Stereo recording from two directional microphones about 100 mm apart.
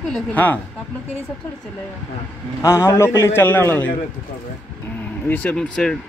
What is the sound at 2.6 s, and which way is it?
Speech, 30° left (ahead or behind).